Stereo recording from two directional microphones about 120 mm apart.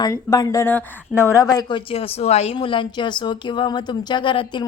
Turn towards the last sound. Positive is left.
turn(degrees=45)  # may be behind; listen again after turning